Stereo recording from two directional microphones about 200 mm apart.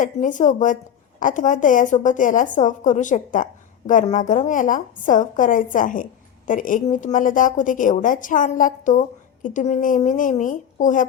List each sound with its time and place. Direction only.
0.0 s a woman's voice: 40° left (ahead or behind)